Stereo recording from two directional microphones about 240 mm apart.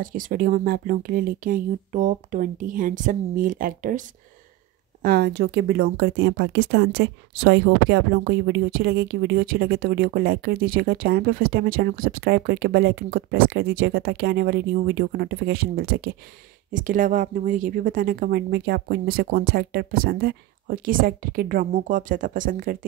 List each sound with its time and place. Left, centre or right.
0.0 s speech: right
5.0 s speech: right